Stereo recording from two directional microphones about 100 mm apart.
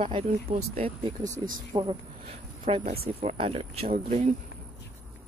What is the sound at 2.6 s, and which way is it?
Speech, 70° right (ahead or behind).